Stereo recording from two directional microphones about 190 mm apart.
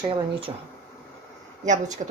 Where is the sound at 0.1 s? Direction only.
25° right (ahead or behind).